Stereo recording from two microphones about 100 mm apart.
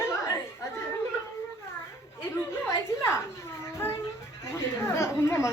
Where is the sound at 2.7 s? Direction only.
25° left (ahead or behind).